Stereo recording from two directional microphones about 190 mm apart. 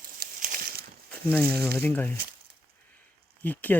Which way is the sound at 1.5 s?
55° right (ahead or behind).